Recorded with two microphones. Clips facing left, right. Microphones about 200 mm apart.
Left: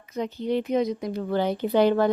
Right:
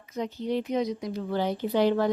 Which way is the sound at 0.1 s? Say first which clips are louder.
Left 3 dB; 60° left (ahead or behind).